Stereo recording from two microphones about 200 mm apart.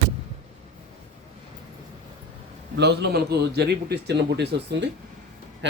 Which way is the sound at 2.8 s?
55° right (ahead or behind).